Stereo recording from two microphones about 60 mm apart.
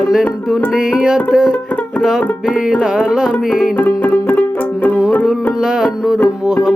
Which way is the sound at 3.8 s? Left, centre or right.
Left.